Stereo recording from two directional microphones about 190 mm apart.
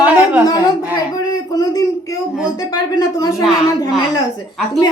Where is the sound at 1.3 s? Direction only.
20° left (ahead or behind).